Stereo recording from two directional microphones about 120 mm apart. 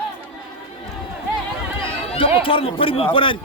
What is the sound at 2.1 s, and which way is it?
Speech, 50° left (ahead or behind).